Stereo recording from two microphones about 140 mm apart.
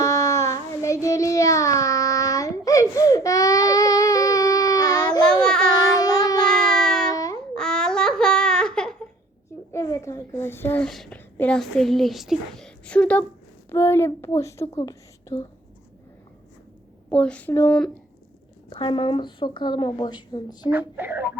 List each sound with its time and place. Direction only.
0.0 s child singing: 20° left (ahead or behind)
5.2 s child singing: 5° left (ahead or behind)
5.9 s child singing: 25° left (ahead or behind)
6.7 s a sound: 5° left (ahead or behind)
7.5 s baby cry: 5° left (ahead or behind)
9.7 s a sound: 20° left (ahead or behind)
10.8 s a woman's voice: centre (ahead or behind); by 15.4 s 20° left (ahead or behind)
17.1 s a woman's voice: 10° left (ahead or behind)
18.7 s speech: 35° left (ahead or behind)
20.7 s a woman's voice: 15° right (ahead or behind)